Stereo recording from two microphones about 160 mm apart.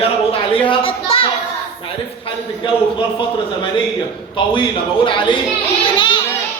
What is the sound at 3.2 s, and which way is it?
A man's voice, 30° left (ahead or behind).